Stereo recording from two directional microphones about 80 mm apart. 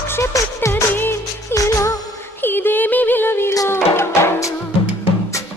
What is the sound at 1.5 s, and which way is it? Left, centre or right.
Music, left.